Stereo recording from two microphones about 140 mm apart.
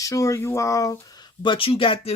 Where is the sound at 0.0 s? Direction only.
20° left (ahead or behind).